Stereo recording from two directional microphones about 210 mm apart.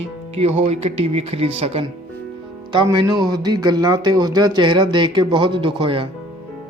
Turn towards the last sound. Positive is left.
turn(degrees=-25)  # may be behind; listen again after turning